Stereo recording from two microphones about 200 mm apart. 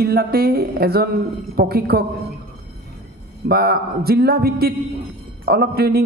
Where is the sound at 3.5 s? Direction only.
50° right (ahead or behind).